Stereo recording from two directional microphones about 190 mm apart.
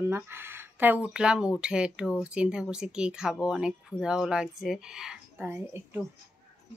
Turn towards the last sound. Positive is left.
turn(degrees=-10)  # may be behind; listen again after turning